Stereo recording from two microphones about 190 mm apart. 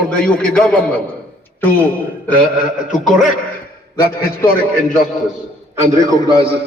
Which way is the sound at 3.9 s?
15° left (ahead or behind).